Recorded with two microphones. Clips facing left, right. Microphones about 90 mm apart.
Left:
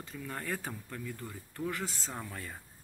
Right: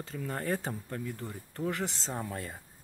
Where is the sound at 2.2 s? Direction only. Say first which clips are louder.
Right 5 dB; 40° right (ahead or behind).